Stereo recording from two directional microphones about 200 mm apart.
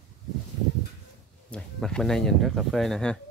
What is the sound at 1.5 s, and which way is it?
Speech, 5° left (ahead or behind).